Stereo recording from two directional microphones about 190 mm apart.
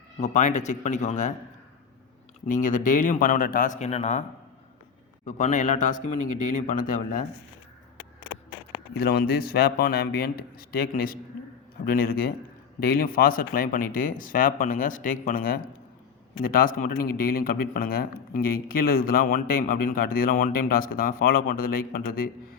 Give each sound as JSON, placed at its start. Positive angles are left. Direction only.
{"t": 0.2, "sound": "speech", "side_deg": 40}
{"t": 2.5, "sound": "a man's voice", "side_deg": 45}
{"t": 5.2, "sound": "a man's voice", "side_deg": 40}
{"t": 8.9, "sound": "a man's voice", "side_deg": 55}